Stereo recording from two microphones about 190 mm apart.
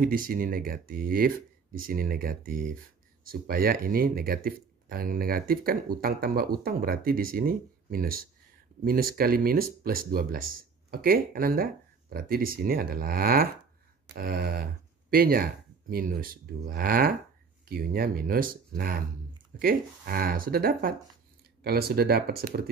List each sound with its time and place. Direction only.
0.0 s speech: 50° right (ahead or behind)